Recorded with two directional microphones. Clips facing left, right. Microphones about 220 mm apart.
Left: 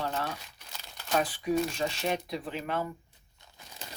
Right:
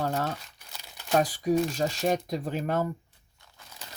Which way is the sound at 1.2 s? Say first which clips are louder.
Right 3 dB; 40° right (ahead or behind).